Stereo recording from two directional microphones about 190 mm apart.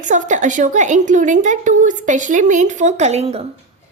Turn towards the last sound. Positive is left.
turn(degrees=-35)  # may be behind; listen again after turning